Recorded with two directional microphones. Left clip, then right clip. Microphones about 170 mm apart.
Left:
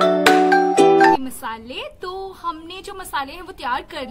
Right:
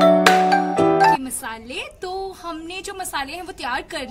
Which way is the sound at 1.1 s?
20° right (ahead or behind).